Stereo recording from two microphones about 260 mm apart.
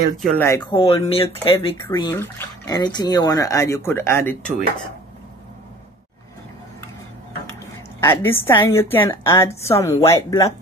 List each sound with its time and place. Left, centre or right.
0.4 s speech: centre
1.9 s speech: centre
8.0 s speech: centre